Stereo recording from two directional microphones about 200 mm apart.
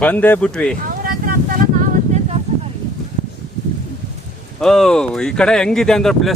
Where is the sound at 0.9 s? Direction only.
45° right (ahead or behind).